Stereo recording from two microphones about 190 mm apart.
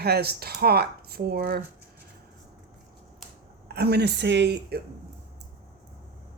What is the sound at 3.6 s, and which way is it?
Speech, 60° right (ahead or behind).